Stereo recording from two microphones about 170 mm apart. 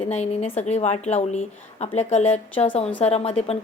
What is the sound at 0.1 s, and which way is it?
A woman's voice, 35° left (ahead or behind).